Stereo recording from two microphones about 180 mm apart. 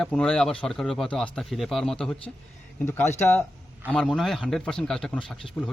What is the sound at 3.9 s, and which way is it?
Speech, 5° left (ahead or behind).